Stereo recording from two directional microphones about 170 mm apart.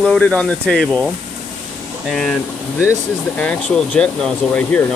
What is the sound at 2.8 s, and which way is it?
Speech, 10° left (ahead or behind).